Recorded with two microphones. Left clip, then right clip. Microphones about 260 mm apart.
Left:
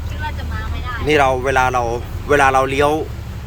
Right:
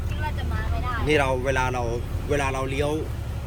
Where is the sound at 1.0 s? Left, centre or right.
Centre.